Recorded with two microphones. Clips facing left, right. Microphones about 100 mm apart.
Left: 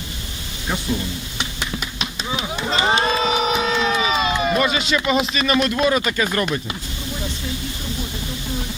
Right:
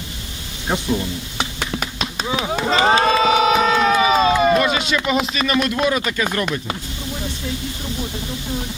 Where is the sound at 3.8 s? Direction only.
50° right (ahead or behind).